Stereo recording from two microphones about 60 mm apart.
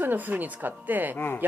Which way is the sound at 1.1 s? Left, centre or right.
Left.